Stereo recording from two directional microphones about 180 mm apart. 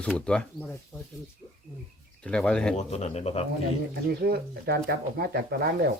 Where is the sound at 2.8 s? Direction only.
40° left (ahead or behind).